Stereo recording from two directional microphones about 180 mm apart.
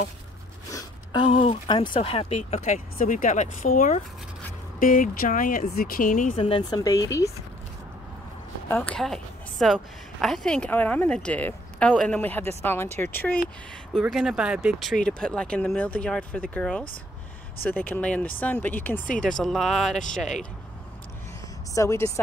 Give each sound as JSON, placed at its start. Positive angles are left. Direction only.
{"t": 0.7, "sound": "a sound", "side_deg": 20}
{"t": 1.2, "sound": "speech", "side_deg": 30}
{"t": 6.4, "sound": "speech", "side_deg": 25}
{"t": 8.7, "sound": "a woman's voice", "side_deg": 5}
{"t": 14.0, "sound": "a woman's voice", "side_deg": -5}
{"t": 21.7, "sound": "a woman's voice", "side_deg": 15}